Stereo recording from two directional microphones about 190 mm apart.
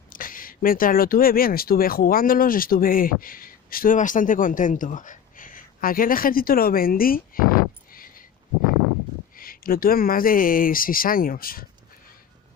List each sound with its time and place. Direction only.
0.1 s speech: 45° left (ahead or behind)
9.4 s speech: 50° left (ahead or behind)